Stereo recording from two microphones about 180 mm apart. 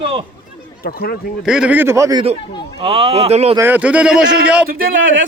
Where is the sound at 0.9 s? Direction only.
55° left (ahead or behind).